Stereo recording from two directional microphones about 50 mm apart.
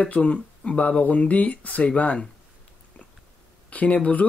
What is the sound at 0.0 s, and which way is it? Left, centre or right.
Speech, left.